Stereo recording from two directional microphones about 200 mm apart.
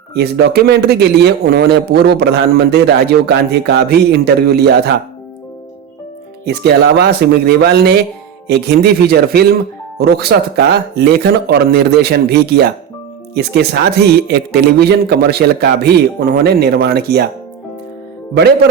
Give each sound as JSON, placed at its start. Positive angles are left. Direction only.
{"t": 0.1, "sound": "a man's voice", "side_deg": -55}
{"t": 6.4, "sound": "a man's voice", "side_deg": -55}